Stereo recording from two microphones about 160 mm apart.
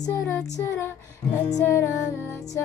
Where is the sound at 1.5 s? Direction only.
15° left (ahead or behind).